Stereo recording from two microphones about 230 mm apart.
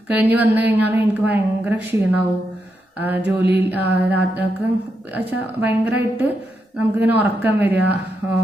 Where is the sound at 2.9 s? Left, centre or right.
Centre.